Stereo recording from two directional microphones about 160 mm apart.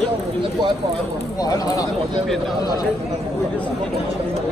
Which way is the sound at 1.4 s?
20° left (ahead or behind).